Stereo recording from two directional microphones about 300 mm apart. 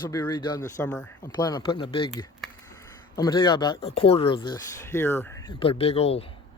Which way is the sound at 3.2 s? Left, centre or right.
Centre.